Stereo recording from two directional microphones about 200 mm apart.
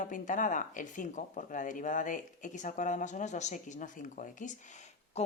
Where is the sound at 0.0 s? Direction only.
40° left (ahead or behind).